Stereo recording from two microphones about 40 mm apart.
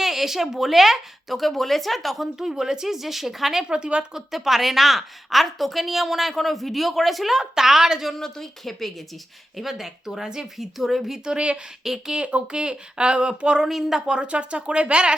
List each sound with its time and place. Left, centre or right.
0.0 s a woman's voice: centre
2.4 s speech: centre
3.6 s a woman's voice: right
4.1 s a woman's voice: centre
8.1 s speech: centre
9.6 s speech: centre
10.6 s a woman's voice: centre
11.3 s a woman's voice: right
11.8 s speech: centre
12.1 s a woman's voice: right
13.7 s speech: centre
14.1 s a woman's voice: right